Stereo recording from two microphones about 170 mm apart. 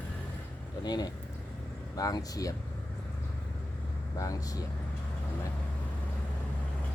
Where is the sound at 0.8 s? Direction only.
25° left (ahead or behind).